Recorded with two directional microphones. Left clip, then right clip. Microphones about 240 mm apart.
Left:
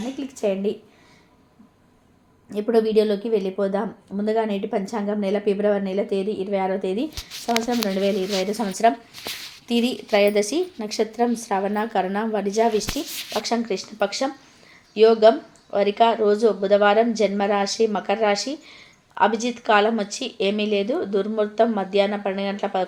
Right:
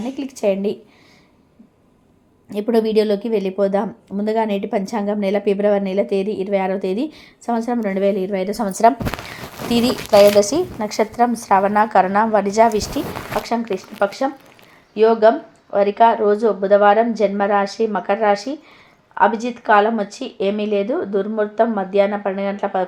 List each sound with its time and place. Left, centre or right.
0.2 s a woman's voice: right
2.5 s a woman's voice: right
7.8 s a woman's voice: centre